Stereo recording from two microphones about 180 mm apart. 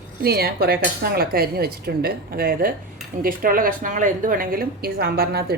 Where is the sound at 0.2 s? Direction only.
60° right (ahead or behind).